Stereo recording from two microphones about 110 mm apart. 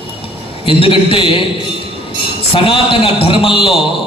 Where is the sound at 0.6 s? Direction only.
55° left (ahead or behind).